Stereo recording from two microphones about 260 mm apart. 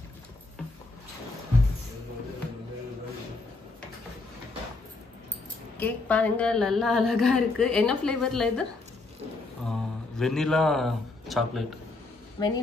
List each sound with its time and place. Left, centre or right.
5.8 s a woman's voice: centre
9.7 s a sound: centre
12.4 s speech: centre